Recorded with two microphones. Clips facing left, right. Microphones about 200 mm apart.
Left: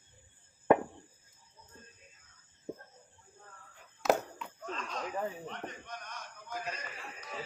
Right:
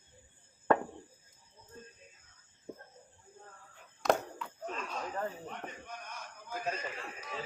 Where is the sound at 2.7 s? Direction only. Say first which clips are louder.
Left 4 dB; 15° left (ahead or behind).